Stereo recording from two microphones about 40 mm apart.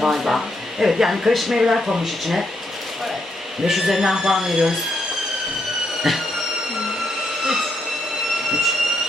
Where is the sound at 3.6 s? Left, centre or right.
Centre.